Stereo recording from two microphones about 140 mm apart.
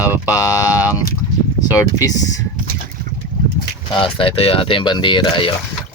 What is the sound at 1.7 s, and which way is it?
Speech, 25° left (ahead or behind).